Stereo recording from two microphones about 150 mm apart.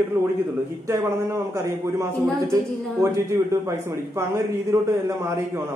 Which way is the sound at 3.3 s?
20° right (ahead or behind).